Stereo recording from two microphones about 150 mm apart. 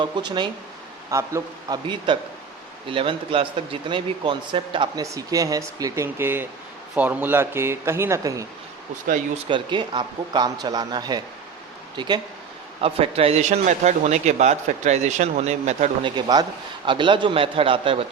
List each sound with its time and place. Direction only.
0.0 s speech: 30° right (ahead or behind)
2.9 s speech: 35° right (ahead or behind)
5.1 s speech: 25° right (ahead or behind)
9.5 s speech: 30° right (ahead or behind)
12.8 s a man's voice: 40° right (ahead or behind)
16.0 s speech: 30° right (ahead or behind)